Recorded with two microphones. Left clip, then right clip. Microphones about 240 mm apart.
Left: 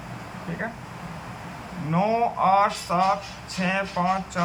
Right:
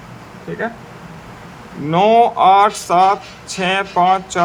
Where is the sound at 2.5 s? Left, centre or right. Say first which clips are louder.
Right 9 dB; right.